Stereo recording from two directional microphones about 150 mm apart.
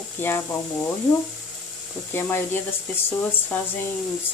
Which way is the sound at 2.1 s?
15° left (ahead or behind).